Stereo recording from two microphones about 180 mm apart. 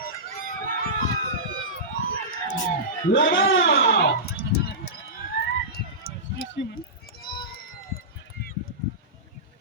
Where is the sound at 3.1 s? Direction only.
90° left.